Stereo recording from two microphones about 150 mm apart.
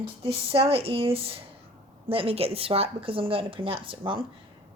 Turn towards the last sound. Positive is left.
turn(degrees=-35)  # may be behind; listen again after turning